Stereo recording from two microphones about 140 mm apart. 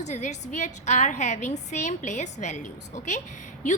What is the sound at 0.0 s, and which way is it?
A woman's voice, 60° left (ahead or behind).